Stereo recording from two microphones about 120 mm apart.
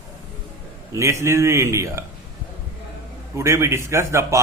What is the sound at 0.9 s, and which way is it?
A man's voice, 25° right (ahead or behind).